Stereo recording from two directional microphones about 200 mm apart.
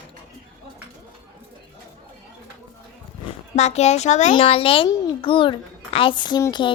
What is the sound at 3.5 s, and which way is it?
A child's voice, 35° left (ahead or behind).